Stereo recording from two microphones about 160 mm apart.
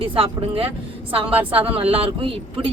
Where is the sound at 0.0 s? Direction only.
35° right (ahead or behind).